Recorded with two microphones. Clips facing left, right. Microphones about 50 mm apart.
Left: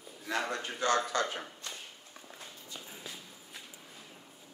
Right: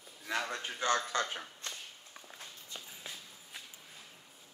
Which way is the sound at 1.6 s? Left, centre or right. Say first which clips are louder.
Even; right.